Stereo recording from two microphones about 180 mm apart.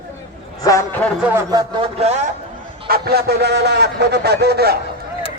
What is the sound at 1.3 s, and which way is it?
Speech, 20° right (ahead or behind).